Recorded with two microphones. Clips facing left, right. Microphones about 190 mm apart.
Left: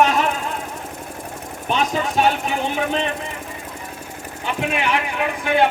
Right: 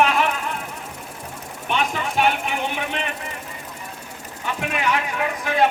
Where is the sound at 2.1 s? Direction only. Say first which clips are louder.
Left 1 dB; 35° left (ahead or behind).